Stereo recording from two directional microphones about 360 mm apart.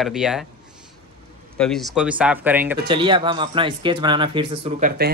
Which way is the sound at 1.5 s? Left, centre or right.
Centre.